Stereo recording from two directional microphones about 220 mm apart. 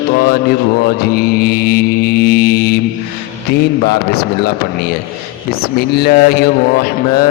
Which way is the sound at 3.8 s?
45° left (ahead or behind).